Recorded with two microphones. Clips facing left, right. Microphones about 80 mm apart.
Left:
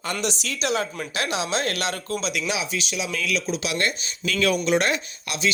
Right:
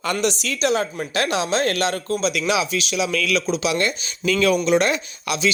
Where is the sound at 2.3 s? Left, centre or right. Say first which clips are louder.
Right 6 dB; right.